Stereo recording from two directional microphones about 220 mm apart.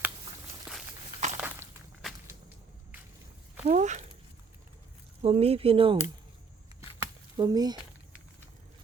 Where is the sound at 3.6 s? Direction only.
35° right (ahead or behind).